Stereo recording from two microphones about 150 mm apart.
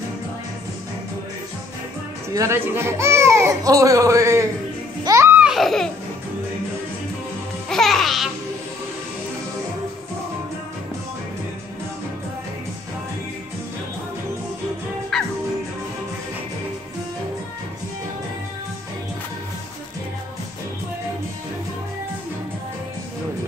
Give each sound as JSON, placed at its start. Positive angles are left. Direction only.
{"t": 2.3, "sound": "speech", "side_deg": -20}
{"t": 5.0, "sound": "music", "side_deg": -20}
{"t": 5.5, "sound": "laughter", "side_deg": 0}
{"t": 7.7, "sound": "music", "side_deg": 0}
{"t": 15.1, "sound": "music", "side_deg": 5}